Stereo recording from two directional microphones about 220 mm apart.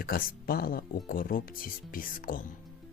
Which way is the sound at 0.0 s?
40° left (ahead or behind).